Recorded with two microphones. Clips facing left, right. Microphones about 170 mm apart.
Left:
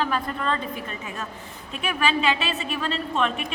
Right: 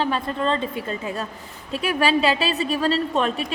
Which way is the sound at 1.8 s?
35° right (ahead or behind).